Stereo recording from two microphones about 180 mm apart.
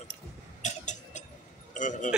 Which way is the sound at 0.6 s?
40° left (ahead or behind).